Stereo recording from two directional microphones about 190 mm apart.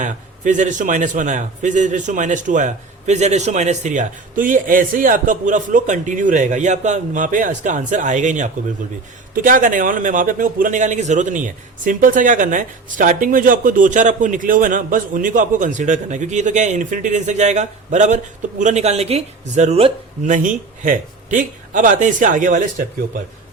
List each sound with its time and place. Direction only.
0.0 s a man's voice: 40° right (ahead or behind)